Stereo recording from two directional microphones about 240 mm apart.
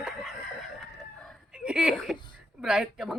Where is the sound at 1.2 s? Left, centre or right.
Centre.